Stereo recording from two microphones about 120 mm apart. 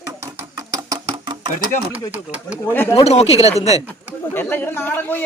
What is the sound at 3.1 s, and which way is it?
Speech, 60° left (ahead or behind).